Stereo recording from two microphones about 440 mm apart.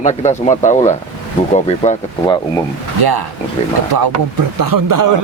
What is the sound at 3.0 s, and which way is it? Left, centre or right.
Speech, right.